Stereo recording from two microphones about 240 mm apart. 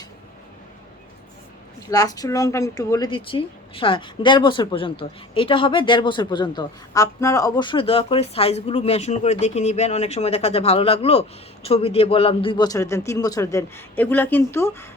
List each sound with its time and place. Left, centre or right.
1.9 s a woman's voice: centre